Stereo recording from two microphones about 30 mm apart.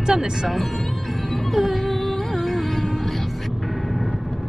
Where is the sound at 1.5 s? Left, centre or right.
Centre.